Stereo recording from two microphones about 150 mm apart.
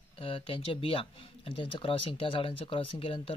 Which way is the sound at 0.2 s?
35° left (ahead or behind).